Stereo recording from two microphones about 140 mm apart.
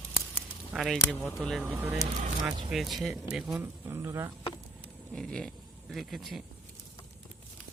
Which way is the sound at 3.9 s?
20° right (ahead or behind).